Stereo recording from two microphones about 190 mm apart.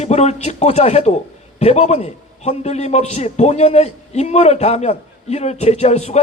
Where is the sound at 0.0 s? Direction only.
35° left (ahead or behind).